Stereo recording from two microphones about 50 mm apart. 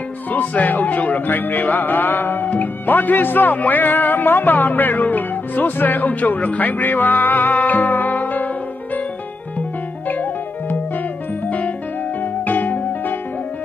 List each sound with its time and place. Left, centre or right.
0.3 s music: left
10.0 s music: left
12.2 s music: left